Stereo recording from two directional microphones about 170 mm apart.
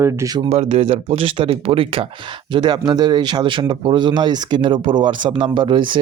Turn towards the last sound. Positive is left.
turn(degrees=-30)  # may be behind; listen again after turning